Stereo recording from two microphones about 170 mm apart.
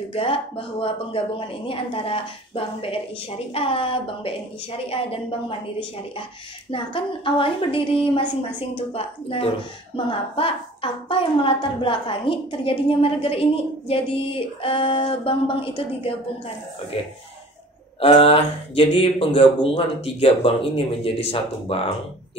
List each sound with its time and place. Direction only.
0.1 s a woman's voice: 35° left (ahead or behind)
6.7 s a woman's voice: 30° left (ahead or behind)